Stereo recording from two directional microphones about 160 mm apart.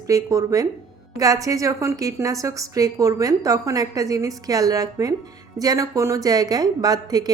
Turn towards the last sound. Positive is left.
turn(degrees=-25)  # may be behind; listen again after turning